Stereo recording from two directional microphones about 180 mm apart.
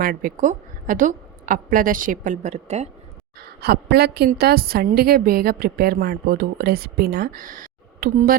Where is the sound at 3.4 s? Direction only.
60° right (ahead or behind).